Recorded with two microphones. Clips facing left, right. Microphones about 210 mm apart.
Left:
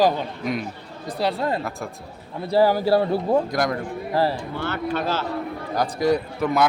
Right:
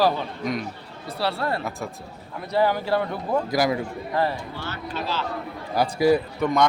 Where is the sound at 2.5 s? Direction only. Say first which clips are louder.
Left 4 dB; 35° left (ahead or behind).